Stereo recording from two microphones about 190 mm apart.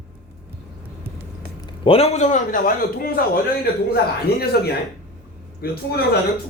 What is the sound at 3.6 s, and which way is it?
A man's voice, 55° left (ahead or behind).